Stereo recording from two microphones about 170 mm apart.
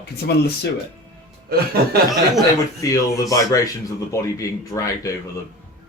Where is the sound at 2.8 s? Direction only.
20° left (ahead or behind).